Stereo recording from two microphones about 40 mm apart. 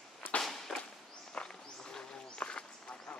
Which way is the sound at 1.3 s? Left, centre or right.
Left.